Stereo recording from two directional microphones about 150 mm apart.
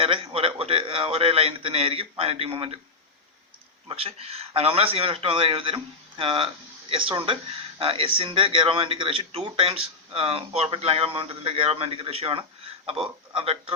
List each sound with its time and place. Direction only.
0.0 s a man's voice: 35° right (ahead or behind)
3.8 s speech: 40° right (ahead or behind)